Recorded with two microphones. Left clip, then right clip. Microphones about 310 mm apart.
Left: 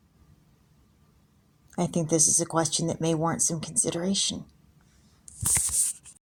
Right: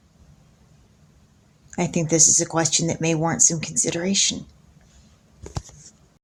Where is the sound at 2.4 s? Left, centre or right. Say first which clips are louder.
Right 5 dB; left.